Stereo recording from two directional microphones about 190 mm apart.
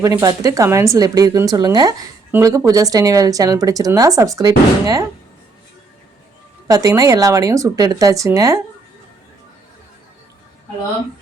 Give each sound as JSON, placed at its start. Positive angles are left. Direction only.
{"t": 0.0, "sound": "speech", "side_deg": -20}
{"t": 6.7, "sound": "speech", "side_deg": -15}